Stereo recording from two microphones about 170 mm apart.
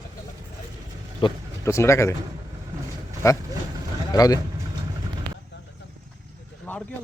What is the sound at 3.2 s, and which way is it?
Speech, 20° left (ahead or behind).